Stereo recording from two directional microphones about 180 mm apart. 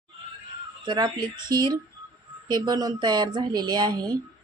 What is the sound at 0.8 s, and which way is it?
Speech, 25° right (ahead or behind).